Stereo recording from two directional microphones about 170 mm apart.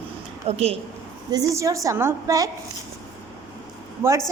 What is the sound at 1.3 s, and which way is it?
A woman's voice, 20° right (ahead or behind).